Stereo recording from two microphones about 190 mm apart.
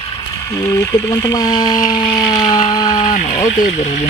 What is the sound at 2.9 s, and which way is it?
Speech, 45° left (ahead or behind).